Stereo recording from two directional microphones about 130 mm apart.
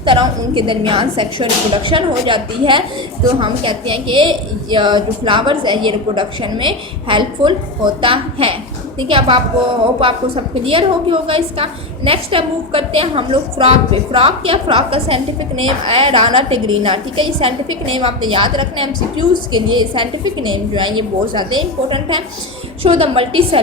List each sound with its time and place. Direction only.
0.0 s a woman's voice: 40° right (ahead or behind)